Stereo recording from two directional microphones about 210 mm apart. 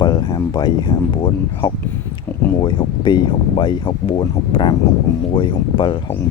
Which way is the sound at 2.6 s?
20° left (ahead or behind).